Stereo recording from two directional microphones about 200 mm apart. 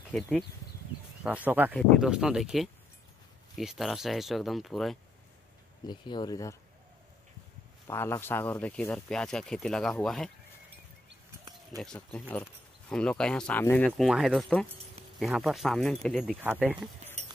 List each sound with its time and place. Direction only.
0.1 s speech: 5° left (ahead or behind)
1.2 s speech: 5° right (ahead or behind)
5.9 s speech: 20° left (ahead or behind)
7.8 s speech: 15° left (ahead or behind)
11.8 s speech: 5° left (ahead or behind)
16.3 s speech: 10° right (ahead or behind)